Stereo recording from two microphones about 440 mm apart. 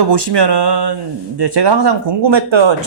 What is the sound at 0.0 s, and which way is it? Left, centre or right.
Speech, right.